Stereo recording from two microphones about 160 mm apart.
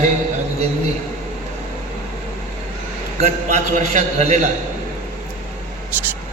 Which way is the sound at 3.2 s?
45° right (ahead or behind).